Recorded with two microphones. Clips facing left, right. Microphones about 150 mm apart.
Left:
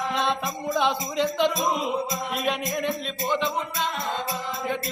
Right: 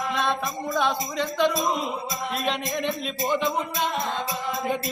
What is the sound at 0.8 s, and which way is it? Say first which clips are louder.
Speech: left 2 dB; 20° left (ahead or behind).